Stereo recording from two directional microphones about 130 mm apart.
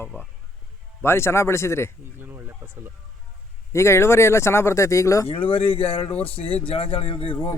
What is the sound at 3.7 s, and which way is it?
Speech, 20° left (ahead or behind).